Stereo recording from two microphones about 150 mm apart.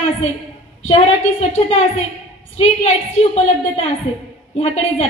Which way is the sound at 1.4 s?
45° left (ahead or behind).